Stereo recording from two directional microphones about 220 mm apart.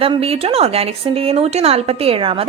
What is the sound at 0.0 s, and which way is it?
A woman's voice, 25° right (ahead or behind).